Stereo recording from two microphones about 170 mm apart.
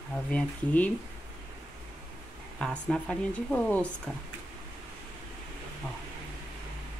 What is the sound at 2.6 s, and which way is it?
A woman's voice, 5° left (ahead or behind).